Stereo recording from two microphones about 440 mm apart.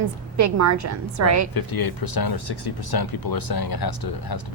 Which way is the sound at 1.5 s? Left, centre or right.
Left.